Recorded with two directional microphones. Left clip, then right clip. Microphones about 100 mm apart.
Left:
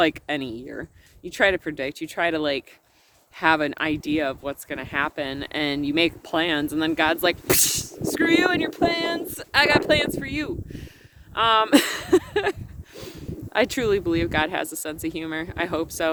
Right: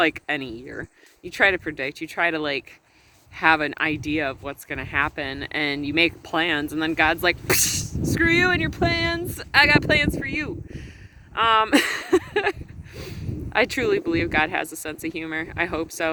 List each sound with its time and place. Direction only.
0.0 s speech: 40° left (ahead or behind)